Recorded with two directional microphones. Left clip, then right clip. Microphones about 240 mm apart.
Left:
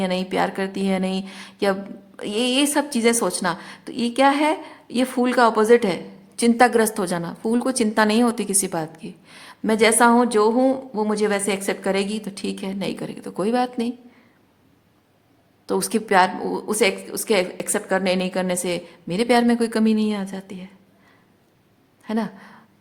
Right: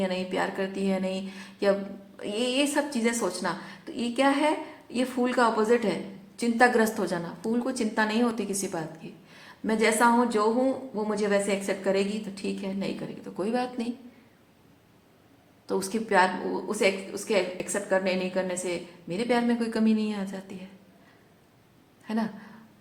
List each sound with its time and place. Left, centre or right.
0.0 s a woman's voice: left
15.6 s a woman's voice: left
22.0 s speech: left